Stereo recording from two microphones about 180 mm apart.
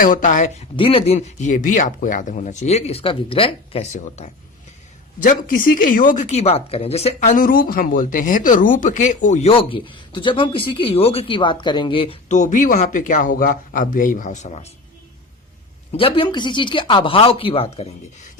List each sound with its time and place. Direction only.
0.0 s speech: 45° left (ahead or behind)
0.8 s speech: 30° left (ahead or behind)
5.2 s speech: 50° left (ahead or behind)
15.9 s speech: 30° left (ahead or behind)